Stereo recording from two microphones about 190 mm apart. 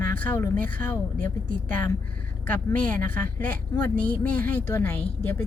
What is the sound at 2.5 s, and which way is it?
A woman's voice, 10° left (ahead or behind).